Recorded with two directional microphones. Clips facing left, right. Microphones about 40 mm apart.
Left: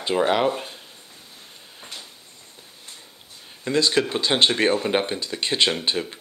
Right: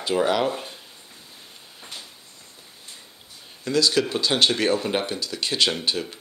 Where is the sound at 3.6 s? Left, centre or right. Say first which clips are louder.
Left 1 dB; left.